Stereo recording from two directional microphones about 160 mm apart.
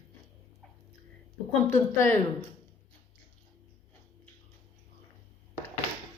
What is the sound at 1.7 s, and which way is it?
Speech, 15° left (ahead or behind).